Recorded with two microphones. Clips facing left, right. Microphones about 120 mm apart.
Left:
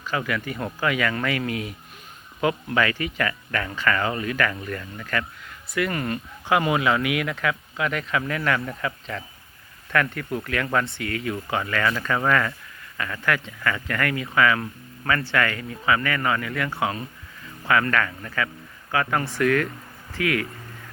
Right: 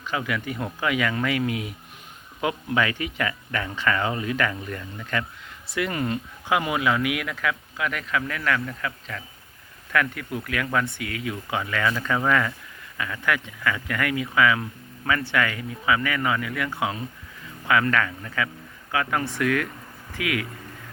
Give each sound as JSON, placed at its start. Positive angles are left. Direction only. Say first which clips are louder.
{"t": 0.0, "sound": "speech", "louder": "left 1 dB", "side_deg": -15}
{"t": 6.5, "sound": "speech", "louder": "left 2 dB", "side_deg": 0}